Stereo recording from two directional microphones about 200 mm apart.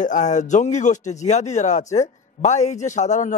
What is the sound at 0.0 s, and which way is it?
Speech, 40° left (ahead or behind).